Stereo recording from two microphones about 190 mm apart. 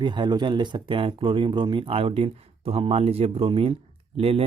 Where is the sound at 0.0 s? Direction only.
25° right (ahead or behind).